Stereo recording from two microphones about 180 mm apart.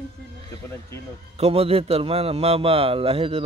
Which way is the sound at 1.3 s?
35° right (ahead or behind).